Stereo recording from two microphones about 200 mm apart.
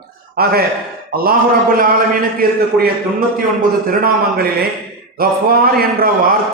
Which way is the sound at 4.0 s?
50° right (ahead or behind).